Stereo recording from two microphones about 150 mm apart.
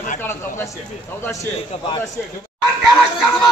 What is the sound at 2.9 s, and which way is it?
Speech, 5° left (ahead or behind).